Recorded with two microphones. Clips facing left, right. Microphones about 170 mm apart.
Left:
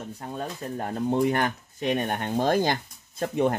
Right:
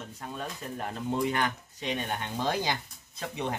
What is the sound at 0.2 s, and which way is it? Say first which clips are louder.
Speech: left 4 dB; 30° left (ahead or behind).